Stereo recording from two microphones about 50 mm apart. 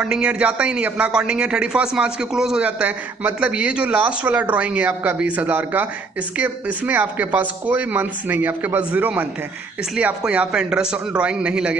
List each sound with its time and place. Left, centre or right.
0.0 s a man's voice: centre
2.6 s a man's voice: right
3.3 s a man's voice: right
10.2 s a man's voice: right